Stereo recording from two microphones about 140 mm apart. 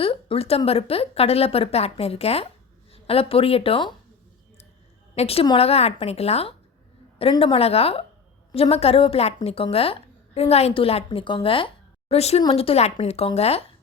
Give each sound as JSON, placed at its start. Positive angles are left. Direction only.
{"t": 0.0, "sound": "a woman's voice", "side_deg": 40}
{"t": 5.1, "sound": "a woman's voice", "side_deg": 45}